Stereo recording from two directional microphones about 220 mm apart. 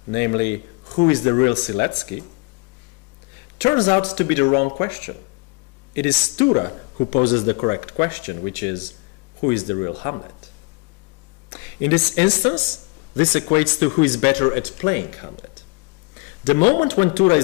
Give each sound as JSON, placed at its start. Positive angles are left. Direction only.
{"t": 0.1, "sound": "speech", "side_deg": 15}
{"t": 3.6, "sound": "speech", "side_deg": 20}
{"t": 11.5, "sound": "speech", "side_deg": 15}
{"t": 16.9, "sound": "speech", "side_deg": 20}